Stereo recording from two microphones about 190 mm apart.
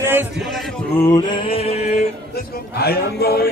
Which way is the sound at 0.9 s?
15° left (ahead or behind).